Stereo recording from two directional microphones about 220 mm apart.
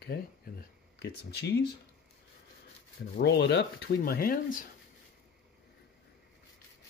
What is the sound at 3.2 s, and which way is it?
Speech, 50° left (ahead or behind).